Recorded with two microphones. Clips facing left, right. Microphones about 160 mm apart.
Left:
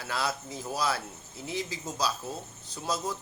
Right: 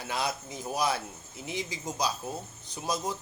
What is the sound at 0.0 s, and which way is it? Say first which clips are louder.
Speech: even; 20° right (ahead or behind).